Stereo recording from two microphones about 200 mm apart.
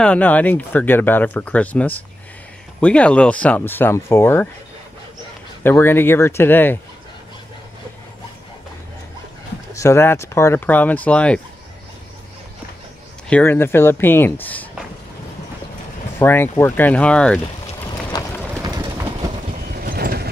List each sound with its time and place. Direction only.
0.0 s speech: 5° left (ahead or behind)
5.6 s speech: 10° left (ahead or behind)
9.8 s speech: 15° left (ahead or behind)
13.3 s speech: 10° left (ahead or behind)
16.2 s speech: 10° left (ahead or behind)
18.1 s a sound: 20° left (ahead or behind)
19.7 s mechanisms: 50° right (ahead or behind)